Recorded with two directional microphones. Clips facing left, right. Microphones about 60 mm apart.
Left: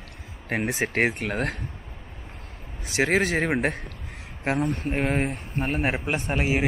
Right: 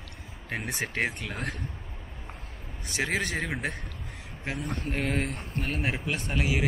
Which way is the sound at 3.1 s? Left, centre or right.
Left.